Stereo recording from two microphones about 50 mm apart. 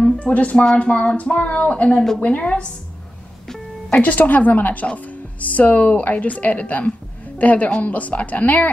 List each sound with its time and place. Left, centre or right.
0.2 s speech: left
3.9 s a woman's voice: left